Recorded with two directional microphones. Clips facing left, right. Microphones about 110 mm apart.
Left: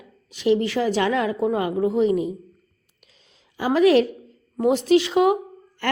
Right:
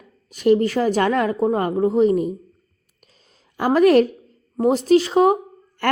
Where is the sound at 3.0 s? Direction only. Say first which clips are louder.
Right 2 dB; 40° right (ahead or behind).